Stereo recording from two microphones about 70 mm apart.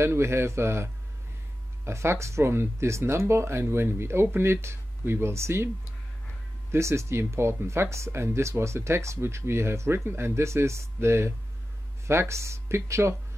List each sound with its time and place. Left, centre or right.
0.0 s speech: right
1.9 s speech: right
6.7 s speech: right